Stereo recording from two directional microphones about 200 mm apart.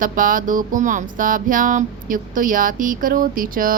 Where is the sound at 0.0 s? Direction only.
45° right (ahead or behind).